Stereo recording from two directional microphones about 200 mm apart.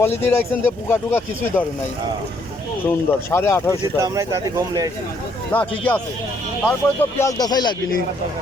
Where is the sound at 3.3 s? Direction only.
15° left (ahead or behind).